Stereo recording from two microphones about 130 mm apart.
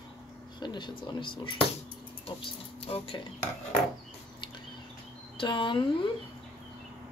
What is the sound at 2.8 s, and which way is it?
Speech, 45° left (ahead or behind).